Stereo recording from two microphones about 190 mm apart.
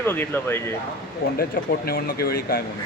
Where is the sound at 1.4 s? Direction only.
50° left (ahead or behind).